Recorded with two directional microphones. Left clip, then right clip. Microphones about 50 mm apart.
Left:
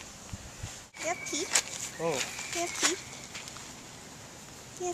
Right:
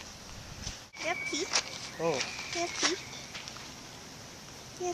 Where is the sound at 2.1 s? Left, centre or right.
Centre.